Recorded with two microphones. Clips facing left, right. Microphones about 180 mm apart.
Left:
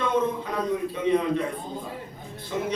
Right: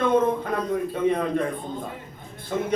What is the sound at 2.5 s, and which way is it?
Speech, 50° right (ahead or behind).